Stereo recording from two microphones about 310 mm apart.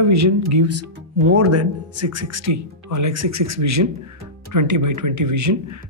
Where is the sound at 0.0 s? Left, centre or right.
Right.